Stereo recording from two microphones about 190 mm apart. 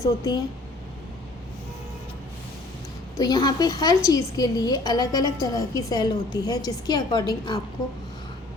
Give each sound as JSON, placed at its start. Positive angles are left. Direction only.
{"t": 0.0, "sound": "a woman's voice", "side_deg": 20}
{"t": 3.2, "sound": "a woman's voice", "side_deg": 20}